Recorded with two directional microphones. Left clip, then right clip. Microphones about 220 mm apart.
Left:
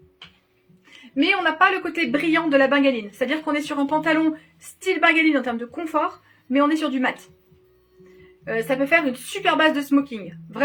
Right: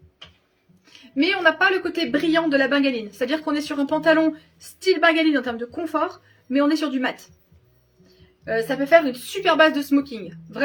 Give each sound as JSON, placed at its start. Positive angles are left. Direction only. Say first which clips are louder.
{"t": 1.1, "sound": "a woman's voice", "louder": "right 1 dB", "side_deg": -20}
{"t": 8.4, "sound": "a woman's voice", "louder": "right 1 dB", "side_deg": -20}